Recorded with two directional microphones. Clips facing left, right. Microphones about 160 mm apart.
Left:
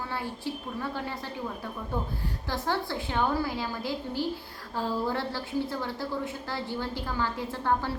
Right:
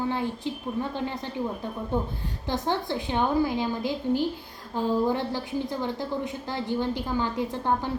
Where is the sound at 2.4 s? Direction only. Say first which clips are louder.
Right 3 dB; 20° right (ahead or behind).